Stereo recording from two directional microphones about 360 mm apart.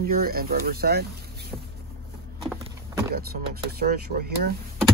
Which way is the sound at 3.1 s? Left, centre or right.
Right.